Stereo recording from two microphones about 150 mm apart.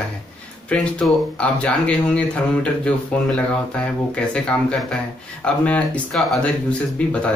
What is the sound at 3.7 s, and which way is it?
Speech, 10° left (ahead or behind).